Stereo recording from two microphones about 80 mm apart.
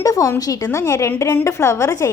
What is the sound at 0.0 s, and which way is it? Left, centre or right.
Speech, left.